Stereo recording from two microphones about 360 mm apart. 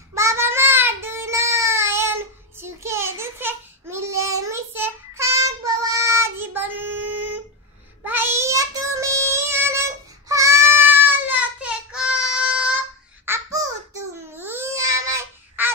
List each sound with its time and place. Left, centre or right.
0.1 s child singing: centre
13.2 s babbling: centre